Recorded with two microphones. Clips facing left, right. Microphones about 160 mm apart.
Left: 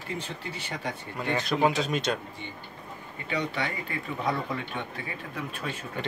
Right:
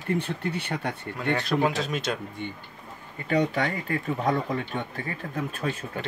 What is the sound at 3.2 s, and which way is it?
Speech, 45° right (ahead or behind).